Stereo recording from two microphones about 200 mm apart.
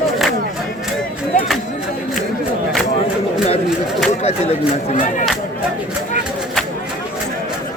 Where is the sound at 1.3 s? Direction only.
40° left (ahead or behind).